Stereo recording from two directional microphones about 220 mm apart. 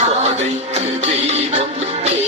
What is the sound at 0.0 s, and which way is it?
Music, 30° right (ahead or behind).